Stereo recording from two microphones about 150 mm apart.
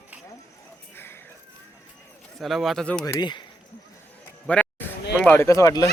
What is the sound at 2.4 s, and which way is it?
Speech, centre (ahead or behind).